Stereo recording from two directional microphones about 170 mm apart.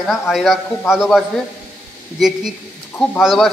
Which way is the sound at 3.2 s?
Centre (ahead or behind).